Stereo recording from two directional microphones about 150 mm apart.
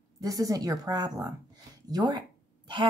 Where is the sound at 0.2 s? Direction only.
25° right (ahead or behind).